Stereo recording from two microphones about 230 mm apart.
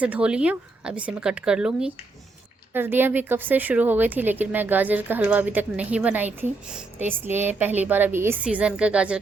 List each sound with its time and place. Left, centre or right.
0.0 s a woman's voice: centre